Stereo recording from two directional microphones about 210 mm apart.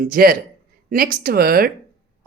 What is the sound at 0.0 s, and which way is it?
Speech, 45° right (ahead or behind).